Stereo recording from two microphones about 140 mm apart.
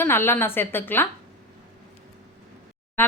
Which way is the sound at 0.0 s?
15° left (ahead or behind).